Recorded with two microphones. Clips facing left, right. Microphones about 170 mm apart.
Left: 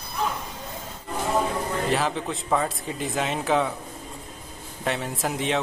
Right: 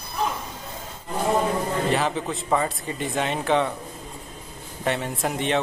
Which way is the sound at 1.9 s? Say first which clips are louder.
Right 1 dB; centre (ahead or behind).